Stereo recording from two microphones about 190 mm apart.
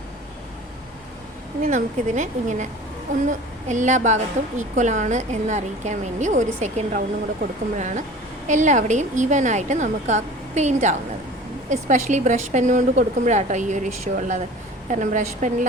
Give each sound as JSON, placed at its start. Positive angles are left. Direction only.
{"t": 1.6, "sound": "a woman's voice", "side_deg": -40}